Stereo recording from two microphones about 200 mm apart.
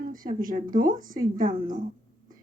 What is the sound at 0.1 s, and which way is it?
A woman's voice, 45° right (ahead or behind).